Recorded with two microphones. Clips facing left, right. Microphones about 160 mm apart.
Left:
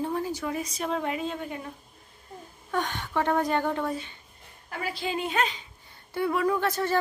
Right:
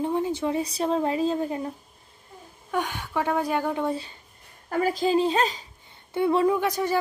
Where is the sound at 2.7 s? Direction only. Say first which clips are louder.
Right 1 dB; 10° right (ahead or behind).